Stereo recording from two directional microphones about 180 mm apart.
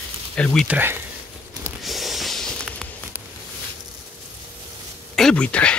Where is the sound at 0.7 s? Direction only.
10° right (ahead or behind).